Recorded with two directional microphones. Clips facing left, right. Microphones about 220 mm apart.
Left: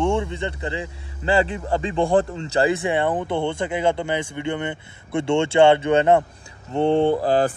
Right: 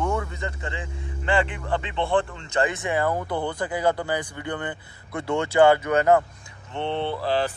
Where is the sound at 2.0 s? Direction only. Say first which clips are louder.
Left 5 dB; 45° left (ahead or behind); by 6.2 s 25° left (ahead or behind).